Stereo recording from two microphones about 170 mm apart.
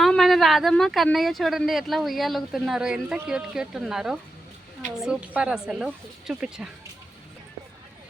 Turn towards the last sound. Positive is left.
turn(degrees=-5)  # may be behind; listen again after turning